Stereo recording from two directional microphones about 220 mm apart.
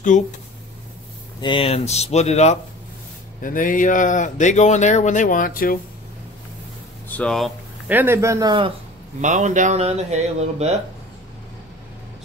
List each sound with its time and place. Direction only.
0.1 s speech: 35° left (ahead or behind)
1.4 s speech: 25° left (ahead or behind); by 5.8 s 40° left (ahead or behind)
7.1 s speech: 5° left (ahead or behind)
8.0 s a man's voice: 10° right (ahead or behind)
9.2 s speech: 35° right (ahead or behind)